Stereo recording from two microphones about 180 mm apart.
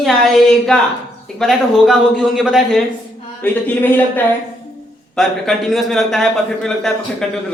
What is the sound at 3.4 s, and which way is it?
A man's voice, 10° left (ahead or behind).